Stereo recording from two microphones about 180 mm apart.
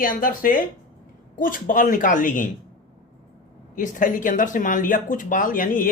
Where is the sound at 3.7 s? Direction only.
45° left (ahead or behind).